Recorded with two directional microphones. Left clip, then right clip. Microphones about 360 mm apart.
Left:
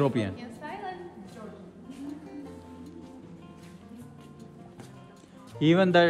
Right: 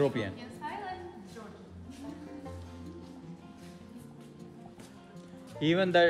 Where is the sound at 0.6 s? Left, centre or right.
Centre.